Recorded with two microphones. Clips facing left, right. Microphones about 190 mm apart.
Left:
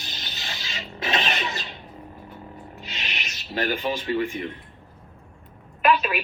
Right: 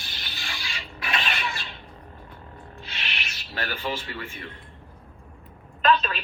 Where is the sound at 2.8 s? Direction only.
20° left (ahead or behind).